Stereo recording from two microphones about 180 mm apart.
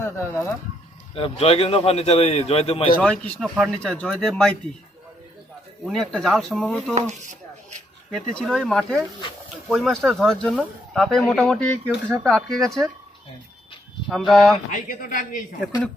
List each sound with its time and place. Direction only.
0.0 s speech: 15° left (ahead or behind)
1.1 s a man's voice: 30° left (ahead or behind)
3.0 s speech: 5° left (ahead or behind)
5.8 s speech: centre (ahead or behind)
6.9 s a sound: 40° right (ahead or behind)
8.1 s speech: 5° left (ahead or behind)
14.1 s speech: centre (ahead or behind)
14.7 s speech: 50° left (ahead or behind)